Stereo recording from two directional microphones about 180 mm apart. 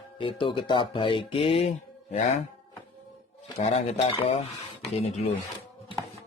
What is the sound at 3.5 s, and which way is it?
Speech, 40° left (ahead or behind).